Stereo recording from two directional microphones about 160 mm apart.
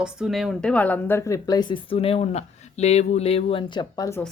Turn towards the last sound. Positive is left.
turn(degrees=20)  # may be behind; listen again after turning